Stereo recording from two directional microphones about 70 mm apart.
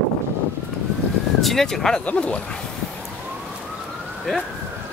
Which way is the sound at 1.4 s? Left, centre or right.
Centre.